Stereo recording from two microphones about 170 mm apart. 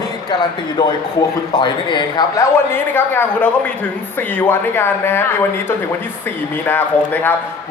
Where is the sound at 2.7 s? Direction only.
10° left (ahead or behind).